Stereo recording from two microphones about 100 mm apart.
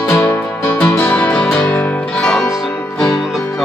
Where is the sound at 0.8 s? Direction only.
15° left (ahead or behind).